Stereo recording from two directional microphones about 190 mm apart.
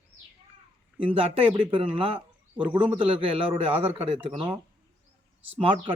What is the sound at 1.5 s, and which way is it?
Speech, 30° right (ahead or behind).